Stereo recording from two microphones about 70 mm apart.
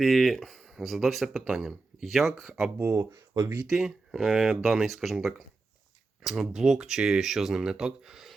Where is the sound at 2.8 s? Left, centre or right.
Right.